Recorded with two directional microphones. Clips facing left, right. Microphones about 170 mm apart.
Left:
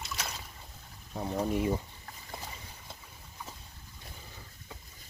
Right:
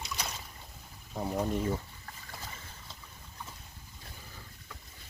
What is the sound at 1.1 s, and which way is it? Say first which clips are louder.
Speech: left 1 dB; centre (ahead or behind).